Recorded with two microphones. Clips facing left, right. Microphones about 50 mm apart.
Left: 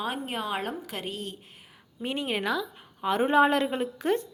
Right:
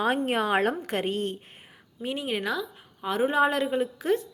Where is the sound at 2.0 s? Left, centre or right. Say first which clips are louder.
Even; centre.